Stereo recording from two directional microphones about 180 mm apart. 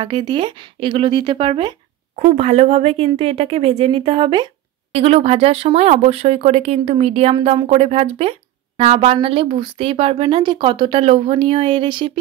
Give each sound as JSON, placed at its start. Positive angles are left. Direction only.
{"t": 0.0, "sound": "speech", "side_deg": -25}
{"t": 2.1, "sound": "speech", "side_deg": -35}